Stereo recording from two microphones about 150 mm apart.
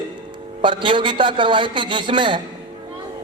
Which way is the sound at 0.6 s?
35° right (ahead or behind).